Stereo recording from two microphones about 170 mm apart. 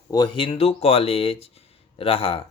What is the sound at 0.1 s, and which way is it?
Speech, 25° left (ahead or behind).